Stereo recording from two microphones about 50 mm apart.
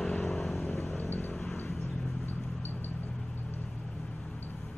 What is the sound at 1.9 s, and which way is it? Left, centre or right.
Vehicle, centre.